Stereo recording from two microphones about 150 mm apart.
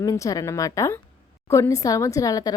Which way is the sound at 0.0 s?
20° left (ahead or behind).